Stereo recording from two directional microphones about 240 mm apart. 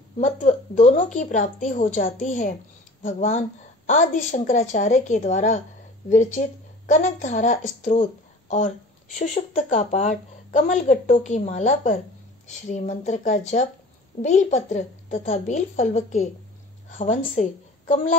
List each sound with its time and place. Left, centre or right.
0.2 s a woman's voice: left